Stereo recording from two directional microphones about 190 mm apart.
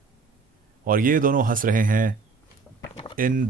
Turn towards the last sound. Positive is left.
turn(degrees=-45)  # may be behind; listen again after turning